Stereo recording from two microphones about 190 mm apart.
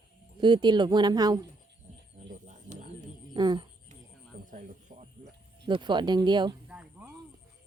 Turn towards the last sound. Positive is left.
turn(degrees=-5)  # may be behind; listen again after turning